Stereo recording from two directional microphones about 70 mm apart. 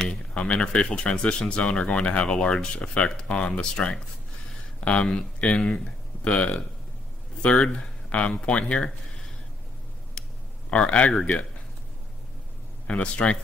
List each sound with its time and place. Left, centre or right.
0.1 s speech: centre
10.7 s speech: centre
12.8 s speech: centre